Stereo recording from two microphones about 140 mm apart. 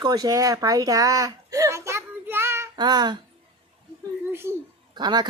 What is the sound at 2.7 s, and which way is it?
Speech, 30° right (ahead or behind).